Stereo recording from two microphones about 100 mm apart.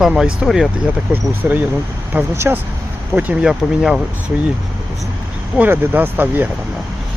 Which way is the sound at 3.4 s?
5° right (ahead or behind).